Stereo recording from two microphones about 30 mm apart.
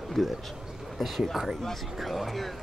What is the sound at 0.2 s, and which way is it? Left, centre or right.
Speech, centre.